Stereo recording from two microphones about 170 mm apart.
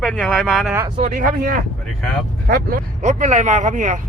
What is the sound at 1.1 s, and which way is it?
Speech, 55° right (ahead or behind).